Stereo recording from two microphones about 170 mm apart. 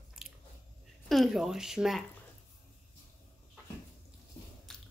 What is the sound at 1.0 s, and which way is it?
A woman's voice, centre (ahead or behind).